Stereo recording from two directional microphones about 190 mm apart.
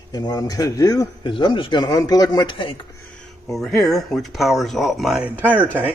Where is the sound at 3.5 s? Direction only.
Centre (ahead or behind).